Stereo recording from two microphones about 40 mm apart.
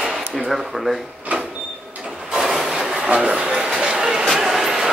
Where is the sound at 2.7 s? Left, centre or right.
Centre.